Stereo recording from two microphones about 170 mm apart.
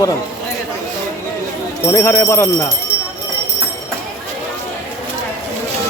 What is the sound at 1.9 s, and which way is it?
Speech, 15° left (ahead or behind).